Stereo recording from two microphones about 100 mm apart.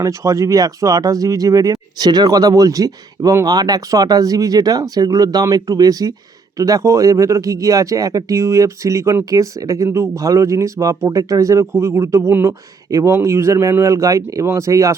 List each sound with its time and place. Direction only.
0.0 s speech: 30° right (ahead or behind)
12.9 s speech: 35° right (ahead or behind)